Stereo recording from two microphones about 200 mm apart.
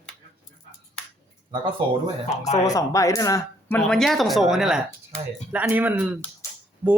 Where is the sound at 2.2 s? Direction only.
35° left (ahead or behind).